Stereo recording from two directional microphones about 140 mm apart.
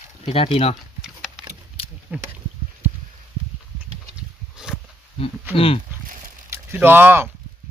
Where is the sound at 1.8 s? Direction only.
40° left (ahead or behind).